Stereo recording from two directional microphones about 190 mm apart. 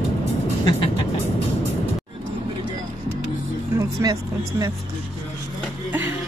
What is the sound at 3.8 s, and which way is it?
Vehicle, 20° right (ahead or behind).